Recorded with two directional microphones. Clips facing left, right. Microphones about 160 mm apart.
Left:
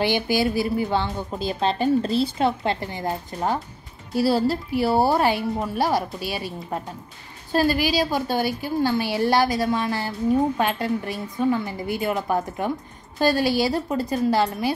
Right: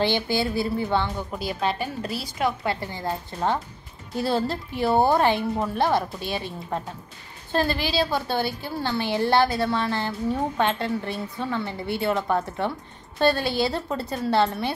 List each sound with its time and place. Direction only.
0.0 s a woman's voice: 15° left (ahead or behind)
4.1 s a woman's voice: 5° left (ahead or behind)
11.6 s a woman's voice: 30° right (ahead or behind)
12.1 s a woman's voice: 10° left (ahead or behind)